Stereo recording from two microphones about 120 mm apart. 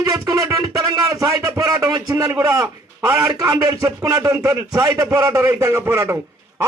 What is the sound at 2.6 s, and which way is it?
A man's voice, 25° right (ahead or behind).